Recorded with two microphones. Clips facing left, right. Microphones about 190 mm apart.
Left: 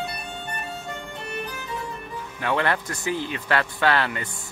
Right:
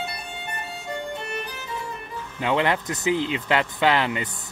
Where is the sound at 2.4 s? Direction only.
15° right (ahead or behind).